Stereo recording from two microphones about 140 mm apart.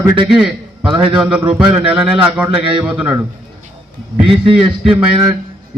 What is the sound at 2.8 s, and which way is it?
Speech, 10° right (ahead or behind).